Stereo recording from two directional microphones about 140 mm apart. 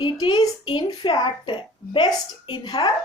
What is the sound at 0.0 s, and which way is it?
A child's voice, 30° left (ahead or behind).